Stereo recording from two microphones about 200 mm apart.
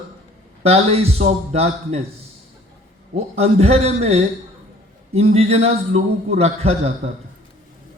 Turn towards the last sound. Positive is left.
turn(degrees=-30)  # may be behind; listen again after turning